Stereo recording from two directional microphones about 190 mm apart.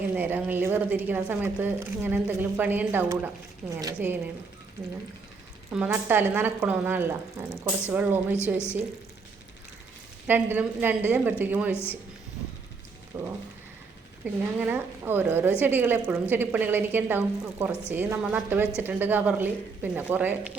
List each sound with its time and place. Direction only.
0.2 s a woman's voice: 10° right (ahead or behind)
5.7 s a woman's voice: 5° right (ahead or behind)
10.2 s a woman's voice: 10° right (ahead or behind)
11.7 s speech: 10° left (ahead or behind)
13.1 s a woman's voice: 15° right (ahead or behind)